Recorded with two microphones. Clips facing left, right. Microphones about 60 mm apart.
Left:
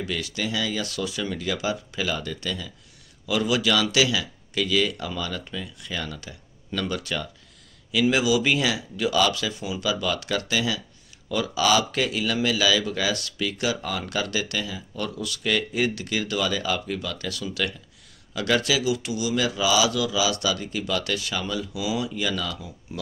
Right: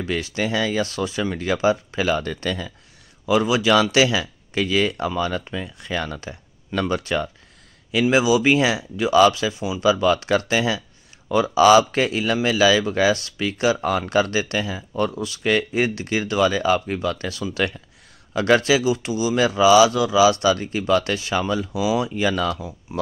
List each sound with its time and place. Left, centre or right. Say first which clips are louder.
0.0 s speech: right 5 dB; right
3.3 s speech: right 5 dB; right
22.6 s speech: right 5 dB; right